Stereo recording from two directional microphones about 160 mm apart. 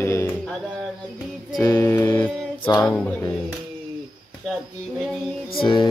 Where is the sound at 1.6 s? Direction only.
15° left (ahead or behind).